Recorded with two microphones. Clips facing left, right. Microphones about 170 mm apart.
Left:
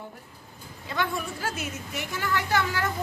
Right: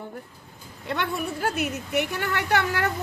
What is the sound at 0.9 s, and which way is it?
A woman's voice, 65° right (ahead or behind).